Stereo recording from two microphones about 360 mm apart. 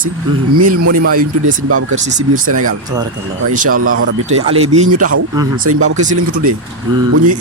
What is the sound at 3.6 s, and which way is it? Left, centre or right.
Speech, right.